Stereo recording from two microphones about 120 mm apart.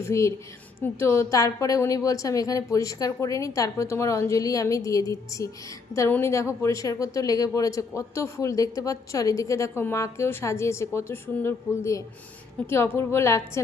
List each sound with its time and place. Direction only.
0.0 s speech: 25° left (ahead or behind)